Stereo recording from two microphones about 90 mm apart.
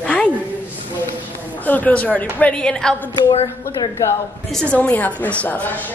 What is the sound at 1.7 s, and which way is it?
A woman's voice, 15° left (ahead or behind).